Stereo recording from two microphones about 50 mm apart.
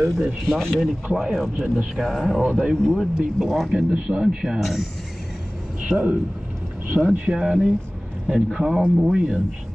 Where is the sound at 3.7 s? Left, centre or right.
Centre.